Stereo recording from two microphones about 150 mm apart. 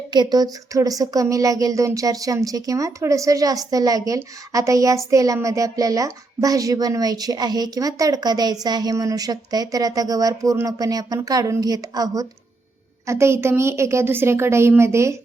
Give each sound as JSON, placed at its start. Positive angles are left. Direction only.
{"t": 0.1, "sound": "a woman's voice", "side_deg": -30}